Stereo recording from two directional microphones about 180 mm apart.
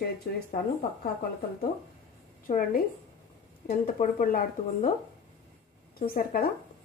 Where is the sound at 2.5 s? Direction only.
45° left (ahead or behind).